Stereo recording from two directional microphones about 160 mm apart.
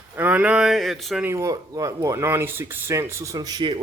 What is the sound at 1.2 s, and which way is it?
Speech, 20° right (ahead or behind).